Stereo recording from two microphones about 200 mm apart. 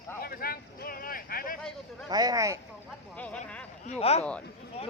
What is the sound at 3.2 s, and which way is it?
Speech, 5° left (ahead or behind).